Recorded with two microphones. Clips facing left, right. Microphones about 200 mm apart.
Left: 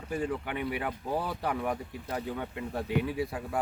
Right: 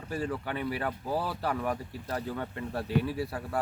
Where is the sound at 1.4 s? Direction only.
15° left (ahead or behind).